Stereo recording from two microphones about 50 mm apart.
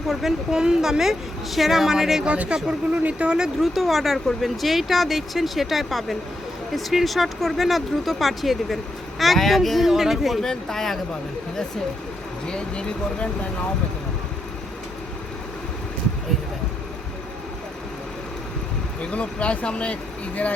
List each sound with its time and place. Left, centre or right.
0.1 s speech: centre
2.2 s speech: right
3.6 s speech: centre
10.4 s speech: centre
12.5 s speech: centre
19.1 s speech: left